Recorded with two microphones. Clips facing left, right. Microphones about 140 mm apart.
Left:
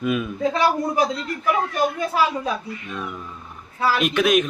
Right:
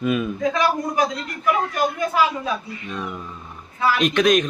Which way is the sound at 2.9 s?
20° right (ahead or behind).